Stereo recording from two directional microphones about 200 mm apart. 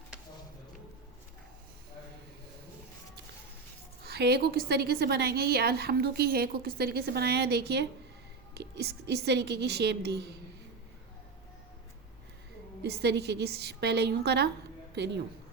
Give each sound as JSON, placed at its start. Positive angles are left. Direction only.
{"t": 4.0, "sound": "a woman's voice", "side_deg": -55}
{"t": 12.8, "sound": "a woman's voice", "side_deg": -55}